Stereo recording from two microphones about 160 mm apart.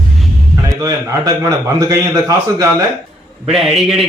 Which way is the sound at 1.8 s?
20° right (ahead or behind).